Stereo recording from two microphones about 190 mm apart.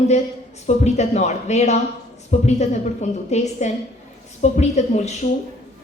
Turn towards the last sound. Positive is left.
turn(degrees=35)  # may be behind; listen again after turning